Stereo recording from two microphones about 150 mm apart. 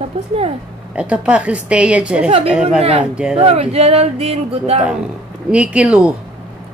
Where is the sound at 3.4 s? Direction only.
40° right (ahead or behind).